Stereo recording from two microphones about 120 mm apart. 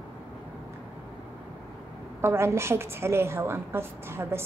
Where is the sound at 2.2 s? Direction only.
20° right (ahead or behind).